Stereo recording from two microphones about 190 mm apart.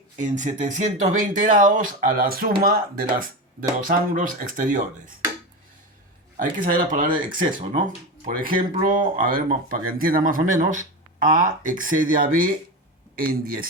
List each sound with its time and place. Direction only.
0.2 s speech: 40° right (ahead or behind)
6.3 s speech: 45° right (ahead or behind)